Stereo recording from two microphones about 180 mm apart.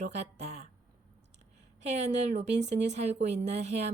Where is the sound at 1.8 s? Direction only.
40° right (ahead or behind).